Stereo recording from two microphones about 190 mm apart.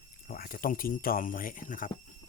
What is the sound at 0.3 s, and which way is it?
Speech, 50° left (ahead or behind).